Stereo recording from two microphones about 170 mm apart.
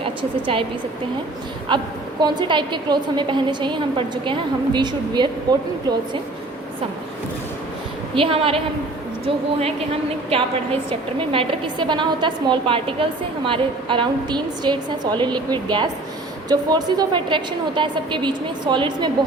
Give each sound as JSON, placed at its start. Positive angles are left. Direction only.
{"t": 0.0, "sound": "a woman's voice", "side_deg": -30}
{"t": 1.7, "sound": "a woman's voice", "side_deg": -30}
{"t": 8.1, "sound": "a woman's voice", "side_deg": -35}